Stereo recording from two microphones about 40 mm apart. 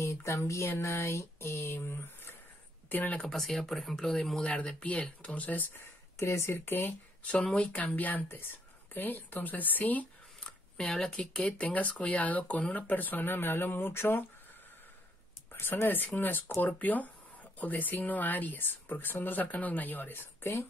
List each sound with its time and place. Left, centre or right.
0.7 s a sound: left
2.9 s speech: left
3.3 s speech: centre
4.4 s speech: left
6.5 s speech: left
7.5 s speech: left
8.3 s a woman's voice: left
10.8 s speech: centre
11.7 s speech: left
15.6 s speech: left
19.4 s speech: left